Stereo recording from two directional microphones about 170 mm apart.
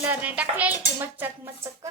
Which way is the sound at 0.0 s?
10° right (ahead or behind).